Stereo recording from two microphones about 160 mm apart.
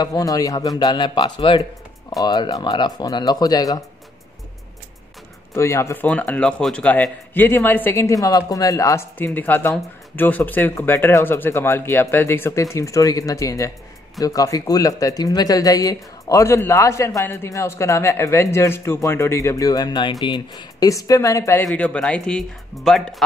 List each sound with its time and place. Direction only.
0.0 s speech: 20° left (ahead or behind)
5.5 s a man's voice: 20° left (ahead or behind)
21.6 s speech: 10° left (ahead or behind)